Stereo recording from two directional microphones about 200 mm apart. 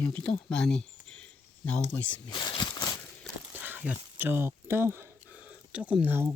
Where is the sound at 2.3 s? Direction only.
20° left (ahead or behind).